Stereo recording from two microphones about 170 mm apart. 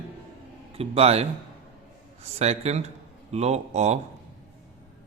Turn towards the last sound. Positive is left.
turn(degrees=-40)  # may be behind; listen again after turning